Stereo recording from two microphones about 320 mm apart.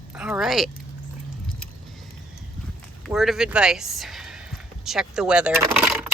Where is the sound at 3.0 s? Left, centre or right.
Centre.